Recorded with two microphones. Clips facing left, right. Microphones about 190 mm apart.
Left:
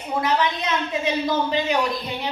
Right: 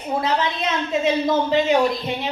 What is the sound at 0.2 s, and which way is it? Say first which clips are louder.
A woman's voice: left 3 dB; 25° right (ahead or behind).